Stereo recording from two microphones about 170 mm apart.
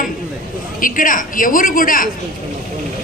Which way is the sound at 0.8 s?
55° left (ahead or behind).